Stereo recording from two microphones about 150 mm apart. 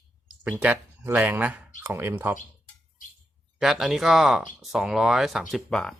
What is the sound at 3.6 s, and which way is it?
Speech, centre (ahead or behind).